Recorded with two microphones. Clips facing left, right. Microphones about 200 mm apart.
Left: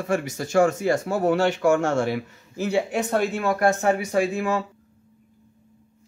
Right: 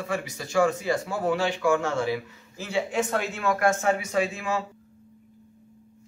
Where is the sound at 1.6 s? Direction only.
45° left (ahead or behind).